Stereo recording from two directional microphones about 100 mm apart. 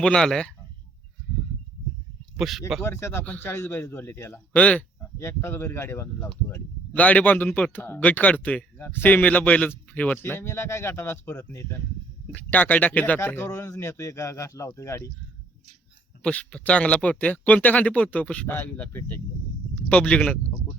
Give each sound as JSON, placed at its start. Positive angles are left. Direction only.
{"t": 0.0, "sound": "speech", "side_deg": 5}
{"t": 2.3, "sound": "speech", "side_deg": -5}
{"t": 2.8, "sound": "a man's voice", "side_deg": 25}
{"t": 5.2, "sound": "a man's voice", "side_deg": 25}
{"t": 16.2, "sound": "speech", "side_deg": 10}